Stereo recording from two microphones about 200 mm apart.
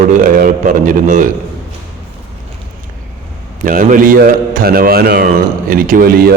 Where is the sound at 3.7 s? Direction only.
40° right (ahead or behind).